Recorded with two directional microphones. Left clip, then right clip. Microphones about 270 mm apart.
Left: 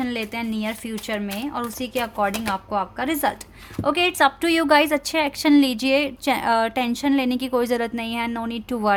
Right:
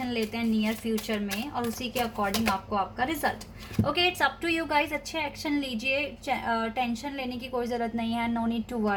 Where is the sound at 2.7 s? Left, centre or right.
Left.